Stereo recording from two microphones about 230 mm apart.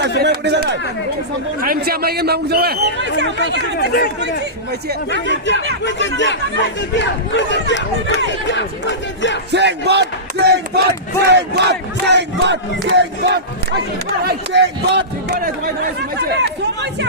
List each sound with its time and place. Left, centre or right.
0.2 s a man's voice: right
3.6 s speech: left
5.2 s speech: left
9.5 s a man's voice: right